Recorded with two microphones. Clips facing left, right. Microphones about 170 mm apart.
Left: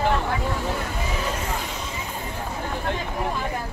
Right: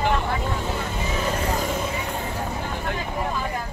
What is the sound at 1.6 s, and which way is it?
Vehicle, 50° right (ahead or behind).